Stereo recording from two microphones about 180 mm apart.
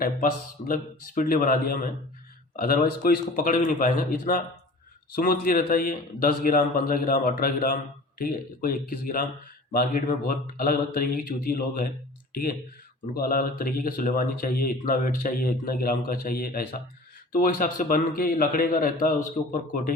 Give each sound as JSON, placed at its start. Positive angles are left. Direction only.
{"t": 0.7, "sound": "speech", "side_deg": 50}